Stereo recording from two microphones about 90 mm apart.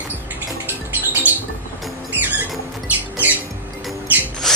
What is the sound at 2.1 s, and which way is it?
Music, 20° right (ahead or behind).